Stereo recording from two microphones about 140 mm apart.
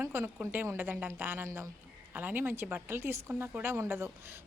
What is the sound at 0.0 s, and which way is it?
Speech, 15° right (ahead or behind).